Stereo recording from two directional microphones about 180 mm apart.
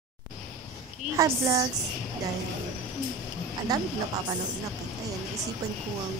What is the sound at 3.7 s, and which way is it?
Speech, 20° right (ahead or behind).